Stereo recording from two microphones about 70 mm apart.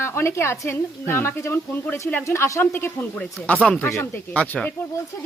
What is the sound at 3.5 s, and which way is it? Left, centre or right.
Speech, left.